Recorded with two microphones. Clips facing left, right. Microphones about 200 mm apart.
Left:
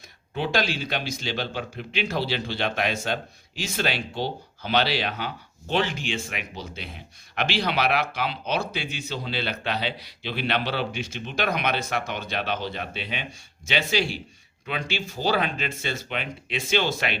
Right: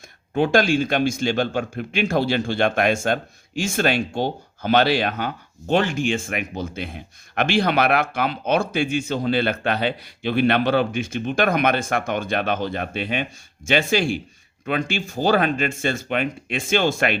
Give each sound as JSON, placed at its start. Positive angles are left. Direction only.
{"t": 0.3, "sound": "speech", "side_deg": -50}